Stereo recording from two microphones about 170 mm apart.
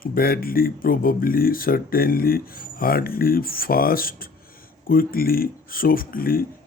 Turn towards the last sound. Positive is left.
turn(degrees=60)  # may be behind; listen again after turning